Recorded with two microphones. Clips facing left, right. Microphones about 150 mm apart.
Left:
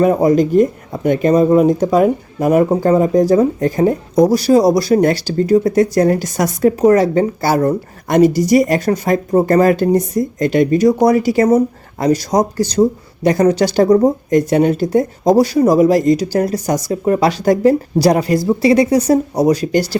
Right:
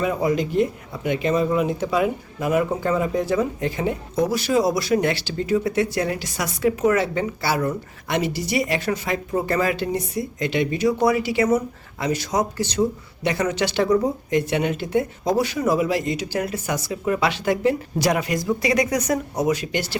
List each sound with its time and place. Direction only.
0.0 s speech: 45° left (ahead or behind)